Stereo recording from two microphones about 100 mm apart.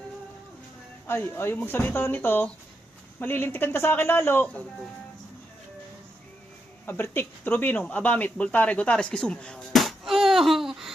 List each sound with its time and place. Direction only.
1.0 s speech: 25° left (ahead or behind)
6.8 s speech: 20° left (ahead or behind); by 10.9 s 5° right (ahead or behind)